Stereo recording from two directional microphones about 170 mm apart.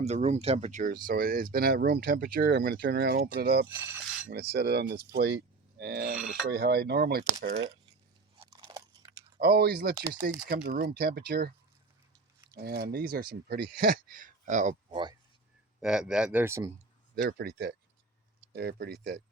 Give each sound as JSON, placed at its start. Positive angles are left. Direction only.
{"t": 0.0, "sound": "speech", "side_deg": -40}
{"t": 3.7, "sound": "speech", "side_deg": -15}
{"t": 4.3, "sound": "speech", "side_deg": -70}
{"t": 8.4, "sound": "crunch", "side_deg": -25}
{"t": 9.4, "sound": "speech", "side_deg": -65}
{"t": 12.5, "sound": "speech", "side_deg": -70}
{"t": 14.8, "sound": "speech", "side_deg": -30}
{"t": 15.8, "sound": "speech", "side_deg": -5}
{"t": 17.2, "sound": "speech", "side_deg": -75}